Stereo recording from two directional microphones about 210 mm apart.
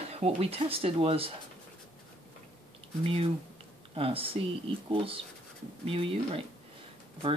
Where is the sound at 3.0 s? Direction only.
25° right (ahead or behind).